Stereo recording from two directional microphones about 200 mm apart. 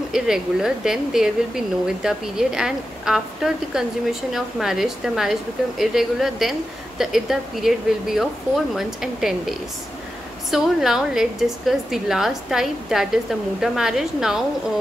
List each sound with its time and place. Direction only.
0.1 s speech: 5° right (ahead or behind)